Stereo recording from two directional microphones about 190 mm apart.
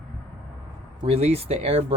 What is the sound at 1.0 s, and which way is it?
Speech, 30° right (ahead or behind).